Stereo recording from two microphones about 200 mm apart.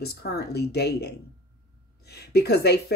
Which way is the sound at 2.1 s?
55° left (ahead or behind).